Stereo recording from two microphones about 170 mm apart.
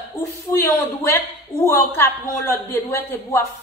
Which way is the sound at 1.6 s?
15° left (ahead or behind).